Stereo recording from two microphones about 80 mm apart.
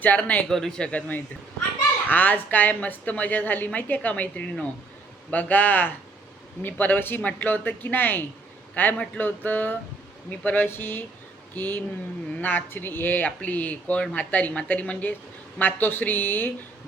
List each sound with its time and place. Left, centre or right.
0.0 s speech: centre
0.4 s a man's voice: centre; by 16.5 s left